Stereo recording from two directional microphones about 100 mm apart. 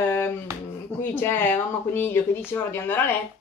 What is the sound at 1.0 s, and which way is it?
Speech, 20° left (ahead or behind).